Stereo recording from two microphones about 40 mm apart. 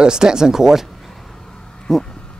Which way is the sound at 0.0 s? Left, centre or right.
Centre.